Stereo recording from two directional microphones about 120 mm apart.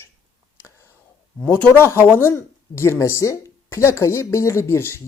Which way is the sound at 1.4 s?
10° left (ahead or behind).